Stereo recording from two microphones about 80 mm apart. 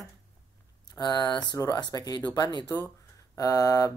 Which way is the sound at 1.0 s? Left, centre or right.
Left.